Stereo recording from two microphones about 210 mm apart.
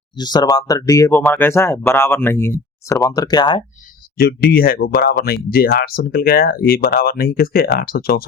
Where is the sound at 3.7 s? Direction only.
45° left (ahead or behind).